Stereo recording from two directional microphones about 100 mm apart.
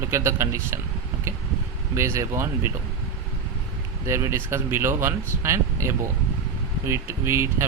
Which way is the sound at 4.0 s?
30° right (ahead or behind).